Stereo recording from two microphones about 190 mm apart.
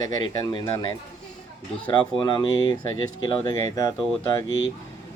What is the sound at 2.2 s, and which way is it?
Speech, 25° left (ahead or behind).